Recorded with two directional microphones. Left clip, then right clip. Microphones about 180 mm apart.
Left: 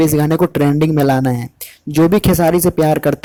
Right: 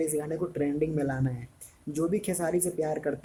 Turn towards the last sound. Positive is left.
turn(degrees=45)  # may be behind; listen again after turning